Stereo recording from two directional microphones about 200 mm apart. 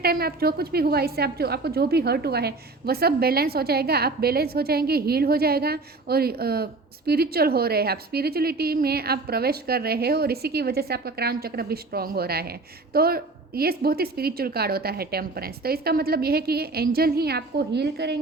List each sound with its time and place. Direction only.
0.0 s a woman's voice: 50° right (ahead or behind)